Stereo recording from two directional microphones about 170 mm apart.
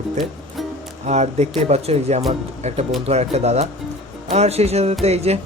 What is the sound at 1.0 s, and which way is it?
Speech, 40° right (ahead or behind).